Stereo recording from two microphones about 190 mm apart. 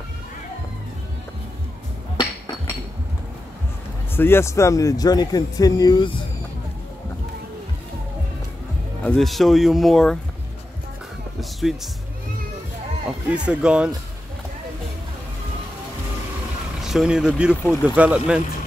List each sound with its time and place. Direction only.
2.1 s chink: 20° left (ahead or behind)
4.1 s speech: 10° left (ahead or behind)
9.0 s speech: centre (ahead or behind)
13.3 s speech: 5° right (ahead or behind)
16.8 s speech: 5° right (ahead or behind)